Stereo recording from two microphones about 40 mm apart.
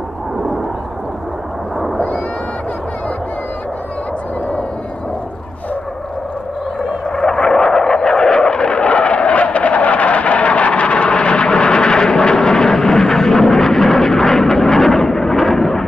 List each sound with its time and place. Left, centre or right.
7.1 s vehicle: centre